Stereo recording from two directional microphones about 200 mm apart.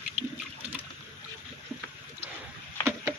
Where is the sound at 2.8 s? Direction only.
10° right (ahead or behind).